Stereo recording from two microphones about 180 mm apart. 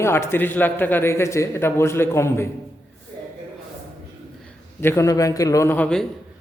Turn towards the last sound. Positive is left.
turn(degrees=5)  # may be behind; listen again after turning